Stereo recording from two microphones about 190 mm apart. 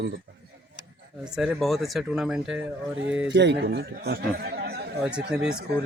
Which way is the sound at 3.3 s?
65° right (ahead or behind).